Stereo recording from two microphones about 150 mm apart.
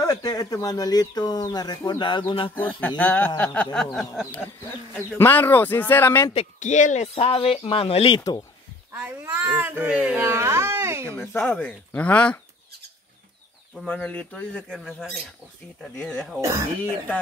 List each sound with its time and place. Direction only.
0.0 s speech: 25° left (ahead or behind)
2.5 s speech: 10° left (ahead or behind)
4.9 s speech: 10° left (ahead or behind)
6.3 s speech: 55° left (ahead or behind); by 8.2 s 35° left (ahead or behind)
8.2 s speech: 25° left (ahead or behind)
8.9 s a child's voice: 10° right (ahead or behind)
11.1 s speech: 10° left (ahead or behind)
13.7 s speech: 5° left (ahead or behind)
16.3 s speech: 20° right (ahead or behind)